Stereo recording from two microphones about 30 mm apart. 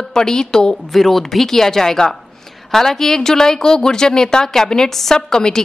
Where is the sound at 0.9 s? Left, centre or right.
Centre.